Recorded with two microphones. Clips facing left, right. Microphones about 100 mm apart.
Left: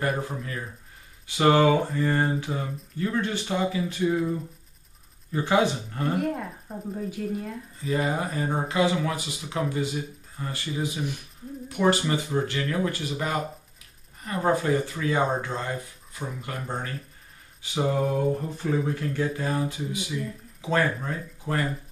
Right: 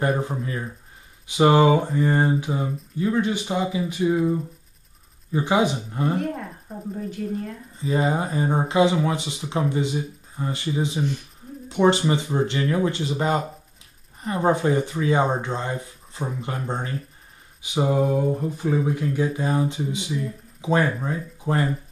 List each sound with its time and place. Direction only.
0.0 s speech: 20° right (ahead or behind)
6.1 s speech: 5° left (ahead or behind)
7.8 s speech: 25° right (ahead or behind)
17.6 s a sound: 15° right (ahead or behind)
18.1 s speech: 10° right (ahead or behind)